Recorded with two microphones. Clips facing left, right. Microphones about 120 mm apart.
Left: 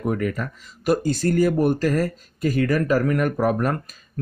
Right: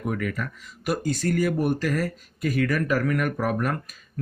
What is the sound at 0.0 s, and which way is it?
Speech, 35° left (ahead or behind).